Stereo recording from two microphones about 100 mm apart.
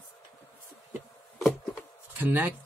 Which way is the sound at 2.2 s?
20° right (ahead or behind).